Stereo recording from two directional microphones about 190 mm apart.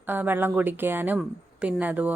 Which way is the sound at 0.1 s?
10° right (ahead or behind).